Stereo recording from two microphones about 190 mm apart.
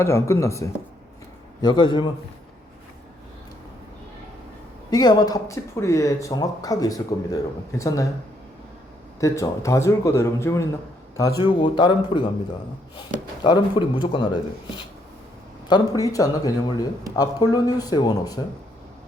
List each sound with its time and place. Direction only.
0.0 s speech: 15° left (ahead or behind)
4.9 s speech: 20° left (ahead or behind)
9.2 s speech: 15° left (ahead or behind)
13.4 s speech: 25° left (ahead or behind)
15.7 s speech: 20° left (ahead or behind)